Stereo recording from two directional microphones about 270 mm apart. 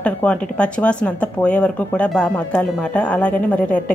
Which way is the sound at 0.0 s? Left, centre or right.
Centre.